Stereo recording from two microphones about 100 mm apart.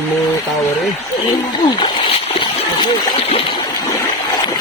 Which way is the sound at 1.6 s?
50° left (ahead or behind).